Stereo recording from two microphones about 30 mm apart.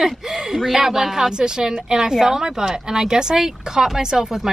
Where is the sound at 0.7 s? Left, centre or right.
Centre.